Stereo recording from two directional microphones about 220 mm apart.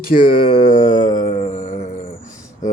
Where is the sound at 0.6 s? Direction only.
20° left (ahead or behind); by 1.8 s 35° left (ahead or behind).